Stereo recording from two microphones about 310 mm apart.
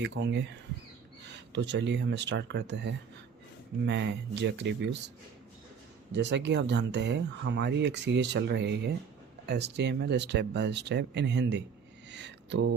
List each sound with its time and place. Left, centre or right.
0.0 s speech: right
1.5 s speech: right
6.1 s speech: right